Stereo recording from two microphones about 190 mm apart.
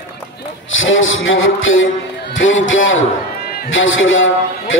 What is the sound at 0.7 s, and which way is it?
A man's voice, 90° left.